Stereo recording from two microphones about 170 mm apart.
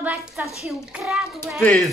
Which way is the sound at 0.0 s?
10° right (ahead or behind).